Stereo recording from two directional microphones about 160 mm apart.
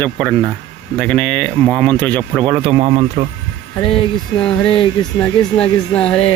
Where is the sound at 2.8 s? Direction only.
40° right (ahead or behind).